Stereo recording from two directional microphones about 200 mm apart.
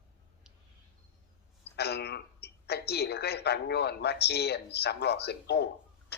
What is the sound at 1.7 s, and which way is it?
A woman's voice, 55° left (ahead or behind).